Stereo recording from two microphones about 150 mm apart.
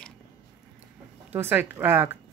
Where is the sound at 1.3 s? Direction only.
15° right (ahead or behind).